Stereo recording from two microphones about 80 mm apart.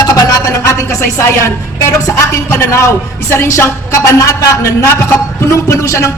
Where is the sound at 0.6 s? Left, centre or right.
Left.